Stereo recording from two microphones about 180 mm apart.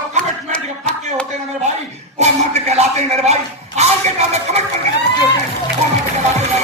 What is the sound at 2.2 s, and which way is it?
A man's voice, 35° right (ahead or behind).